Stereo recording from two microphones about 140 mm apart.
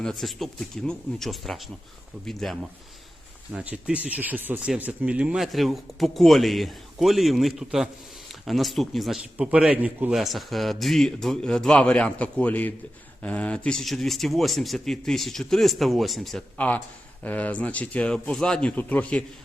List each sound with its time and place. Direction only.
0.0 s a man's voice: centre (ahead or behind)